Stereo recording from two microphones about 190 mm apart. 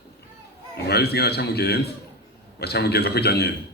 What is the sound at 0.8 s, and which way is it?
A man's voice, 60° left (ahead or behind).